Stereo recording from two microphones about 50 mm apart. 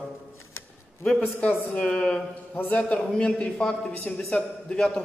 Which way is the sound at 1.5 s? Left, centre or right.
Left.